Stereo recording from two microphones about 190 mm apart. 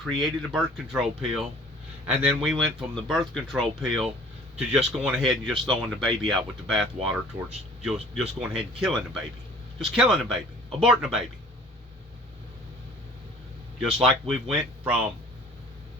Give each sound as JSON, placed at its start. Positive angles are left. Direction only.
{"t": 0.0, "sound": "speech", "side_deg": 0}
{"t": 13.7, "sound": "speech", "side_deg": 0}